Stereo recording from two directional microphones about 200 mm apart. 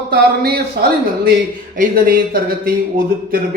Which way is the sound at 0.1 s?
50° right (ahead or behind).